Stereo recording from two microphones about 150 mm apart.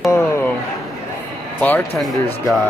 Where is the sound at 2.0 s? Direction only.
Centre (ahead or behind).